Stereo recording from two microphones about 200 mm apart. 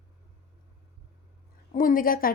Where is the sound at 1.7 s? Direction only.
45° left (ahead or behind).